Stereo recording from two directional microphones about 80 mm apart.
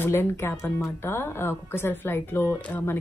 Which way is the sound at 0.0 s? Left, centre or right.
Left.